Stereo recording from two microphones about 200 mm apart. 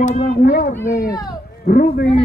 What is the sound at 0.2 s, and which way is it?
Speech, 55° left (ahead or behind).